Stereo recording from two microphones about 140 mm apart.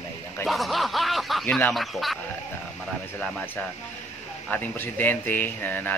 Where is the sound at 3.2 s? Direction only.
10° left (ahead or behind).